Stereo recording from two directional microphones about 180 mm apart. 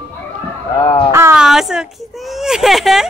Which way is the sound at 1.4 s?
5° right (ahead or behind).